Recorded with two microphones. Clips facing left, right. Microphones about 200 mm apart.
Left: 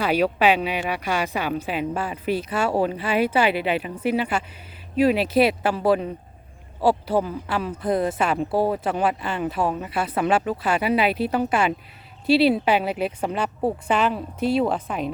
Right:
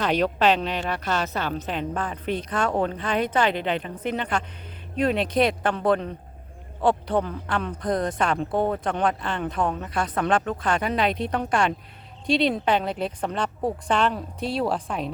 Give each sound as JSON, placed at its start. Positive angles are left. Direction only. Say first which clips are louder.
{"t": 0.0, "sound": "speech", "louder": "left 2 dB", "side_deg": 10}